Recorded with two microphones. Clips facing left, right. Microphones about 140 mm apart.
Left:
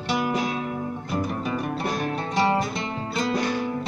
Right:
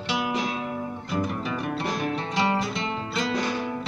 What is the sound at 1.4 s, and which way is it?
Music, 45° left (ahead or behind).